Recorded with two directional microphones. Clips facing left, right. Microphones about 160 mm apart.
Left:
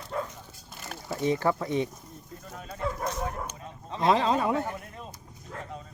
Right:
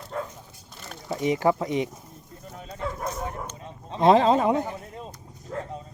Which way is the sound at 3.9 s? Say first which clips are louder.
Right 6 dB; 30° right (ahead or behind).